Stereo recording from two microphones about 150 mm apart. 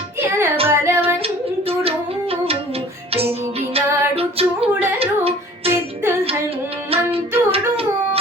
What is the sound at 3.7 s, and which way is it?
Music, 40° right (ahead or behind).